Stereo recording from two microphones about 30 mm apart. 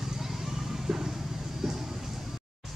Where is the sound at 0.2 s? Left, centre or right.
Centre.